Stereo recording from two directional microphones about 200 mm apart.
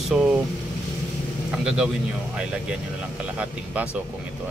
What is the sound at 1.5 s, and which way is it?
Speech, 5° right (ahead or behind).